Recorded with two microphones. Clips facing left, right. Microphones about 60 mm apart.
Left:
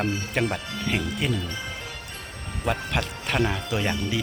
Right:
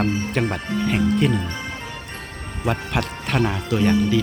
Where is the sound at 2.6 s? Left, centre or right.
Centre.